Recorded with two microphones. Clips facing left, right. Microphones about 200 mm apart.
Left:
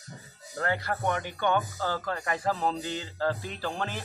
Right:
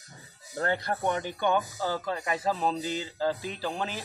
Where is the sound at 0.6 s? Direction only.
20° right (ahead or behind).